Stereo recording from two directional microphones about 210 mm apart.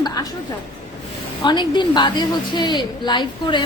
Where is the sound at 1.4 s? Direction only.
20° left (ahead or behind).